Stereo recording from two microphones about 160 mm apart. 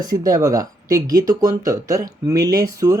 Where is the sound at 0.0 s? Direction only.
25° right (ahead or behind).